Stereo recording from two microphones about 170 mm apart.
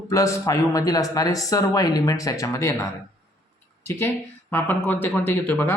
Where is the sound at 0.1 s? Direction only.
20° left (ahead or behind).